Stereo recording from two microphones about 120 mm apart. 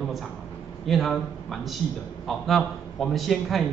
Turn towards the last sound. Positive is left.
turn(degrees=0)  # may be behind; listen again after turning